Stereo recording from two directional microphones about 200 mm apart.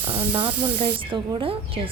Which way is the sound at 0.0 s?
10° right (ahead or behind).